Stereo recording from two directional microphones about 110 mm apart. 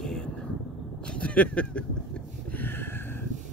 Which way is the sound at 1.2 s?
10° left (ahead or behind).